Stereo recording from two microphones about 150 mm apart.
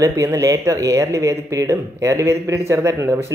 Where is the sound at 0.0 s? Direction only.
20° right (ahead or behind).